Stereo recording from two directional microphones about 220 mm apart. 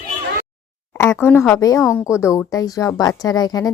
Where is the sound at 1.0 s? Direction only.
10° left (ahead or behind).